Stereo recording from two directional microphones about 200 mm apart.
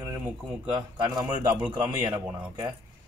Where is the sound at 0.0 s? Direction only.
10° right (ahead or behind).